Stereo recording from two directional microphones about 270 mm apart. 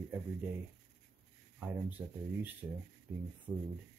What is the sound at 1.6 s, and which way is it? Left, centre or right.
Speech, centre.